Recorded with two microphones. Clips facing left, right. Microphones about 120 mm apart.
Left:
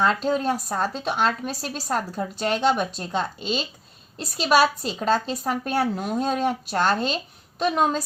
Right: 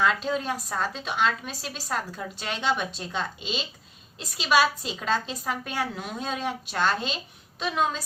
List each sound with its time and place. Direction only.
0.0 s a woman's voice: 40° left (ahead or behind)